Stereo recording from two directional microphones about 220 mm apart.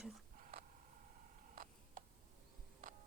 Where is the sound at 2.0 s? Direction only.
40° right (ahead or behind).